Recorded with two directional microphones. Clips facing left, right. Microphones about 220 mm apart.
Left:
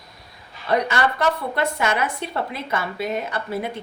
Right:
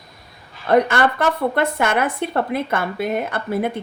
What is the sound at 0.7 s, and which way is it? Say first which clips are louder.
A woman's voice: right 5 dB; 50° right (ahead or behind).